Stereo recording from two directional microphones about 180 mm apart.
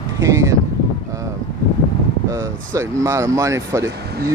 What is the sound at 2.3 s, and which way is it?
Speech, 15° right (ahead or behind).